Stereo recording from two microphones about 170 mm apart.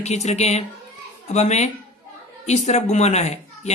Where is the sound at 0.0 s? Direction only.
40° left (ahead or behind).